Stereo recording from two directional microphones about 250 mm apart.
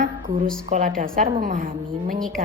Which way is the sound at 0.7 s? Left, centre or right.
Right.